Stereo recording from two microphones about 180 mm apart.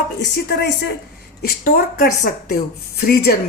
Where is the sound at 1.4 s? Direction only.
55° left (ahead or behind).